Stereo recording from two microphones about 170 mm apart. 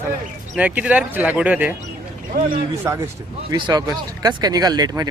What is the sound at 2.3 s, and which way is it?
Speech, 65° right (ahead or behind).